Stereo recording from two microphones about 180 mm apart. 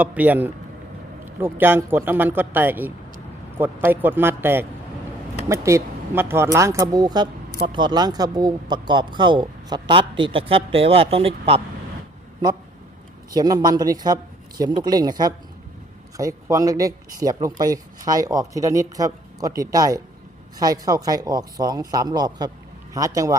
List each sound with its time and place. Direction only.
0.0 s speech: 10° right (ahead or behind); by 11.6 s 30° right (ahead or behind)
13.3 s speech: 20° right (ahead or behind)